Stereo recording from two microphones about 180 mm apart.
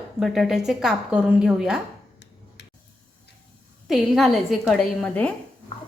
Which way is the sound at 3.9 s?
Centre (ahead or behind).